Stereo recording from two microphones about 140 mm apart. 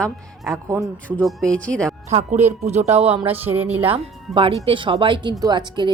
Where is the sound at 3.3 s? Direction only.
15° right (ahead or behind).